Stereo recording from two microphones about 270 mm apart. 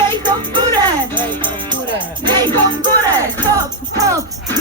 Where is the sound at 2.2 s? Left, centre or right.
Centre.